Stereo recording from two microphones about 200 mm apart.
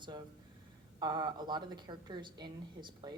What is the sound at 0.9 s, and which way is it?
A woman's voice, 20° right (ahead or behind).